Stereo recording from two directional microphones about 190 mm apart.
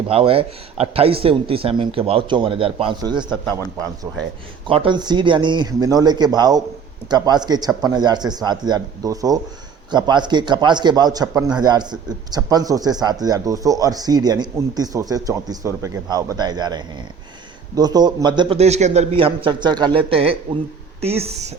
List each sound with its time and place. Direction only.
0.1 s a man's voice: 30° right (ahead or behind)